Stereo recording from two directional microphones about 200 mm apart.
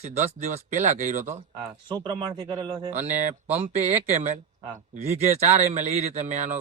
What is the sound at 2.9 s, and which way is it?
Speech, 35° right (ahead or behind).